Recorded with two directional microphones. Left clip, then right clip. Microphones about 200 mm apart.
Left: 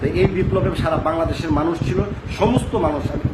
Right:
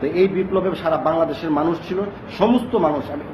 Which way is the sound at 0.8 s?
15° left (ahead or behind).